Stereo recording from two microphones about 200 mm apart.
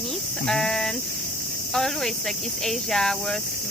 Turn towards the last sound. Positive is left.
turn(degrees=0)  # may be behind; listen again after turning